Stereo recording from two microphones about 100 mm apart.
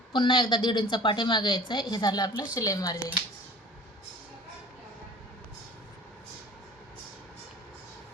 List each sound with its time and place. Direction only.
0.1 s a woman's voice: 55° left (ahead or behind); by 2.9 s 35° left (ahead or behind)